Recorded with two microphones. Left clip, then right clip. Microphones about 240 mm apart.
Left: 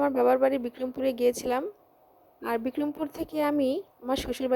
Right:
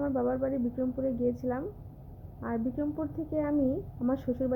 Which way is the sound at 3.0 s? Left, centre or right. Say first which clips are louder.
Left 6 dB; left.